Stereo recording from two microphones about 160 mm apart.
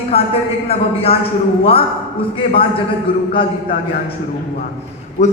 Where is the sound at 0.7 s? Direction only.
40° left (ahead or behind).